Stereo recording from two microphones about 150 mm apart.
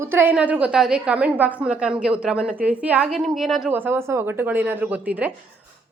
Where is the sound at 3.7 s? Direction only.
15° right (ahead or behind).